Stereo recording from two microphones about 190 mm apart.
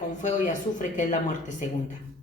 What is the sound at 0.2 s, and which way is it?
A man's voice, 40° left (ahead or behind).